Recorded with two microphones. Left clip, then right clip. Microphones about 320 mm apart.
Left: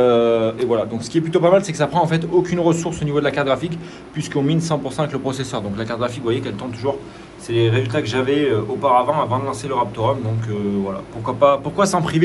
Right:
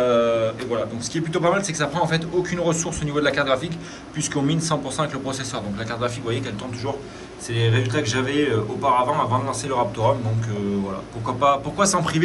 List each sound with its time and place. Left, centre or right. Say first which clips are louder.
0.0 s speech: left 4 dB; centre
11.2 s speech: left 4 dB; centre